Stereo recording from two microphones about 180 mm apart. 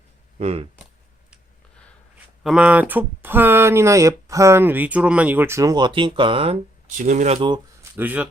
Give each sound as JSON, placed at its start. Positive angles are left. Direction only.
{"t": 0.3, "sound": "speech", "side_deg": -35}
{"t": 2.4, "sound": "speech", "side_deg": -5}
{"t": 7.0, "sound": "speech", "side_deg": -40}
{"t": 7.3, "sound": "speech", "side_deg": -20}
{"t": 7.9, "sound": "speech", "side_deg": -10}